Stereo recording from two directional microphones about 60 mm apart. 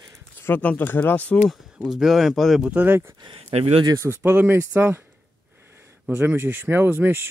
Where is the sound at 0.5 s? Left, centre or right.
Left.